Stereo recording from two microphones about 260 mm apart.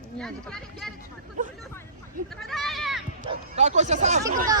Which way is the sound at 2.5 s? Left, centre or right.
Centre.